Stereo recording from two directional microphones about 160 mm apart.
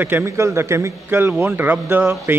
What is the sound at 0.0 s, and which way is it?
A man's voice, 15° right (ahead or behind).